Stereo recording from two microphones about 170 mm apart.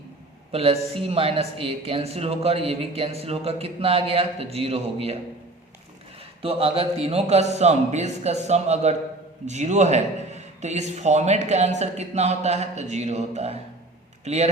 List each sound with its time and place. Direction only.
0.5 s speech: 35° right (ahead or behind)
6.4 s speech: 35° right (ahead or behind)